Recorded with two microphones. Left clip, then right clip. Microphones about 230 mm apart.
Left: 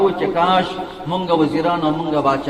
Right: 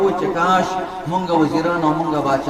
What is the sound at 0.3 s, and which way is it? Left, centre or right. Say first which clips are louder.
A man's voice: even; left.